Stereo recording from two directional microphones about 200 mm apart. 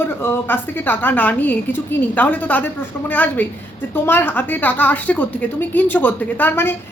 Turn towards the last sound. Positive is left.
turn(degrees=10)  # may be behind; listen again after turning